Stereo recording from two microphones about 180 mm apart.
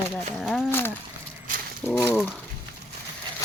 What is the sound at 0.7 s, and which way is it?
Speech, 10° left (ahead or behind).